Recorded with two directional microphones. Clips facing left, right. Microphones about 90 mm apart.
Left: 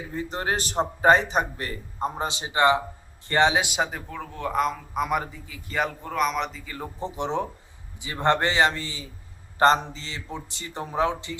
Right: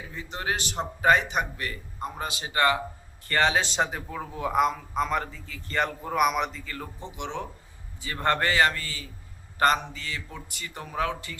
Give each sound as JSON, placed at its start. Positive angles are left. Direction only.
{"t": 0.1, "sound": "a man's voice", "side_deg": 40}
{"t": 5.0, "sound": "a man's voice", "side_deg": 10}
{"t": 6.7, "sound": "a man's voice", "side_deg": 20}
{"t": 7.0, "sound": "a man's voice", "side_deg": 35}
{"t": 7.9, "sound": "a man's voice", "side_deg": 20}